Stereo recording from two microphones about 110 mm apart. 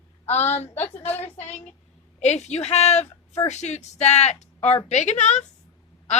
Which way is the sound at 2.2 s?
90° left.